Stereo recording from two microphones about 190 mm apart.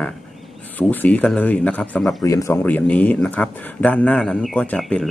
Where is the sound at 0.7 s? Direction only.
10° left (ahead or behind).